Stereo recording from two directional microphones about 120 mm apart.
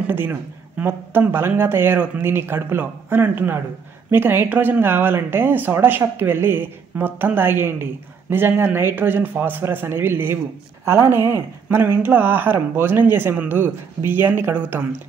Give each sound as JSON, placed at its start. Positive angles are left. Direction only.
{"t": 0.0, "sound": "speech", "side_deg": -15}